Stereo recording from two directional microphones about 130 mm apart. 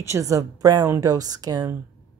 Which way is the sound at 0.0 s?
25° right (ahead or behind).